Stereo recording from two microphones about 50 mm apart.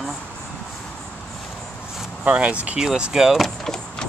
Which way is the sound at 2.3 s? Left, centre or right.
Right.